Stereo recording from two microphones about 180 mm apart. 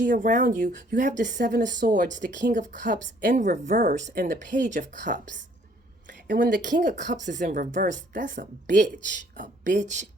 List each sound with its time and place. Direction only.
0.0 s a woman's voice: 45° right (ahead or behind)